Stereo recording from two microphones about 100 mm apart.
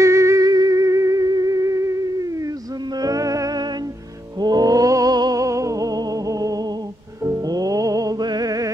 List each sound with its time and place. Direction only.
0.0 s music: 30° right (ahead or behind)